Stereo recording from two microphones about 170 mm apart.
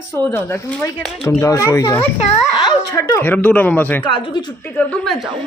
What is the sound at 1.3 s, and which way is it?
Speech, 20° left (ahead or behind).